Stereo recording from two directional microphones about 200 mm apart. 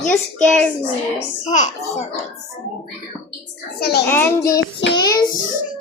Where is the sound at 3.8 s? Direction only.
55° left (ahead or behind).